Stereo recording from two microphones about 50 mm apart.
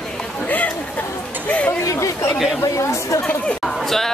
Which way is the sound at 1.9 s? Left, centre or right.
Left.